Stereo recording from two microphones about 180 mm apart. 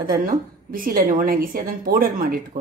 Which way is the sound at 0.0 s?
50° right (ahead or behind).